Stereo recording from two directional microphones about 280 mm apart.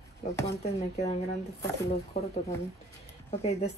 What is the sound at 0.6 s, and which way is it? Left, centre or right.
Speech, left.